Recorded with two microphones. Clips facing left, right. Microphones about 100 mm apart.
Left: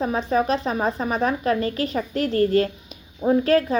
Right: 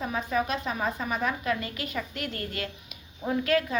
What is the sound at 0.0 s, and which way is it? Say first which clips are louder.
A woman's voice: left 7 dB; 35° left (ahead or behind).